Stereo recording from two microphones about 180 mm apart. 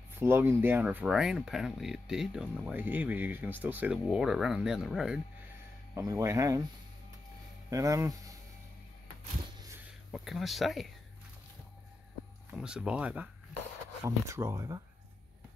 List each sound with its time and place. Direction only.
0.1 s speech: 15° right (ahead or behind)
5.9 s speech: 20° right (ahead or behind)
7.7 s speech: 20° right (ahead or behind)
10.1 s speech: centre (ahead or behind)
12.4 s speech: 5° right (ahead or behind)